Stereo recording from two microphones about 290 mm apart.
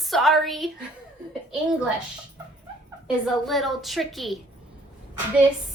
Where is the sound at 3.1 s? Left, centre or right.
Centre.